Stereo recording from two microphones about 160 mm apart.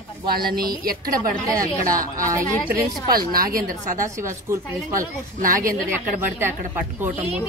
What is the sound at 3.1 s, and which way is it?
A woman's voice, 65° right (ahead or behind).